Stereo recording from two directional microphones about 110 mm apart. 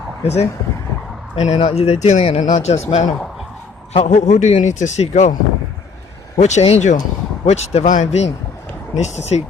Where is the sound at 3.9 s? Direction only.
80° left.